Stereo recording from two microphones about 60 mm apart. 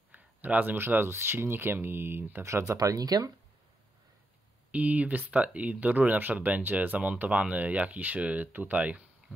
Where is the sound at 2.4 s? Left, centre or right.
Right.